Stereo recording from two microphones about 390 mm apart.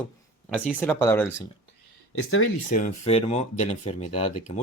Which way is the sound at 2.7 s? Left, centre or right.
Centre.